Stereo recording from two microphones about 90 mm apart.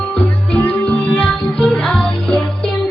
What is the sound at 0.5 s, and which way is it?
Music, 15° left (ahead or behind).